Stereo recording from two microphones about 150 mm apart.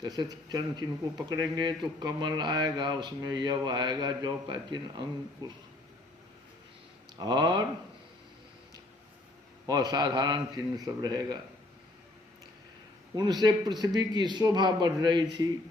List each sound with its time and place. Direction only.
0.0 s speech: 30° right (ahead or behind)
7.2 s speech: 30° right (ahead or behind)
9.6 s speech: 25° right (ahead or behind)
13.1 s speech: 30° right (ahead or behind)